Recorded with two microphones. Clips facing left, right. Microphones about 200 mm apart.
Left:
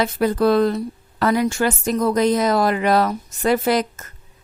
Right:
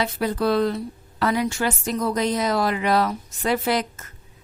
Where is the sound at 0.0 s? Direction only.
50° left (ahead or behind).